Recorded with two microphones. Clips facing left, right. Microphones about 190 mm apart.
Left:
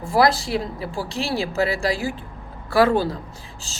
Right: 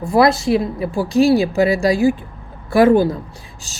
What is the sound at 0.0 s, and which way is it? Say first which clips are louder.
Speech: right 5 dB; 20° right (ahead or behind).